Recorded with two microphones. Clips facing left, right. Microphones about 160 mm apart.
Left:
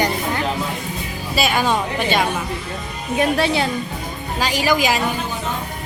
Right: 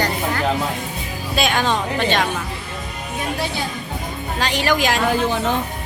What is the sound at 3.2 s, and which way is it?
Speech, 70° left (ahead or behind).